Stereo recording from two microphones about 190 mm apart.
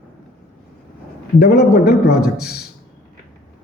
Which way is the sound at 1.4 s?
55° left (ahead or behind).